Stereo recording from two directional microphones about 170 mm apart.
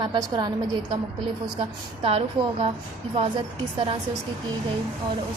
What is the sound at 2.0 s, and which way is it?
Speech, 35° right (ahead or behind).